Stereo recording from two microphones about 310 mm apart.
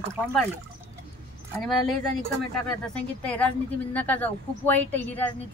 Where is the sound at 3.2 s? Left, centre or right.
Centre.